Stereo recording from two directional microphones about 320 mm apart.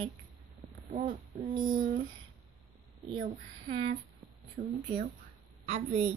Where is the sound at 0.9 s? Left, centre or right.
Right.